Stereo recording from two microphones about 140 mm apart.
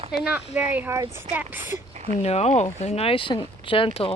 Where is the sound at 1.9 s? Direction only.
55° right (ahead or behind).